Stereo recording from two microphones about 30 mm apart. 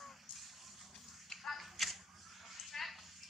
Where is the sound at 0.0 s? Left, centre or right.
Centre.